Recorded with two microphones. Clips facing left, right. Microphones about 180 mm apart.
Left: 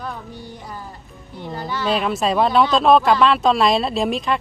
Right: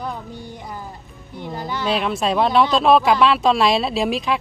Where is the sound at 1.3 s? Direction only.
15° right (ahead or behind).